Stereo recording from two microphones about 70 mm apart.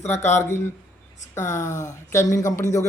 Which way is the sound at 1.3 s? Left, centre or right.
Left.